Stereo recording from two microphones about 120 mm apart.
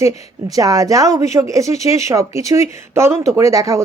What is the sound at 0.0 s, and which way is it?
Speech, 30° right (ahead or behind).